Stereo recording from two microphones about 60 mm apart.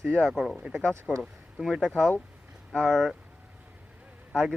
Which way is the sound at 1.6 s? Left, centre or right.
Centre.